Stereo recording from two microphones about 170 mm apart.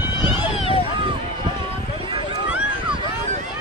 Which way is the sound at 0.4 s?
35° left (ahead or behind).